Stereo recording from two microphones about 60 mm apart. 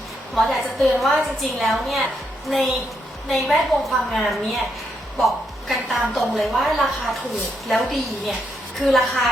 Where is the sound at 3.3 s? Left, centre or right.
Centre.